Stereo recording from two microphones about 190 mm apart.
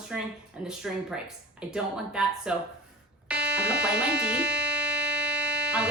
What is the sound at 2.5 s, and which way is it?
Speech, 5° right (ahead or behind).